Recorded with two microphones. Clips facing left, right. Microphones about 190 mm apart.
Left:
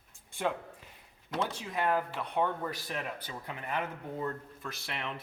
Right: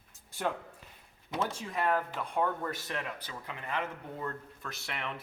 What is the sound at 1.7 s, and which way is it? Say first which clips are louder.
Speech: left 1 dB; 5° left (ahead or behind).